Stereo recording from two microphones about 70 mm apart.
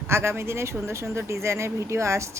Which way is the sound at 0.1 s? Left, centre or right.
Right.